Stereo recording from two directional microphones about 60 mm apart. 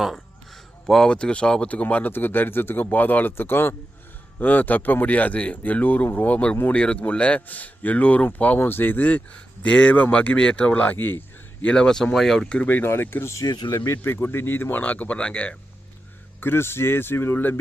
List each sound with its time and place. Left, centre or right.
0.9 s speech: centre
1.1 s a man's voice: centre
11.6 s speech: centre
12.6 s speech: left
14.0 s a man's voice: left; by 15.5 s centre
16.4 s speech: left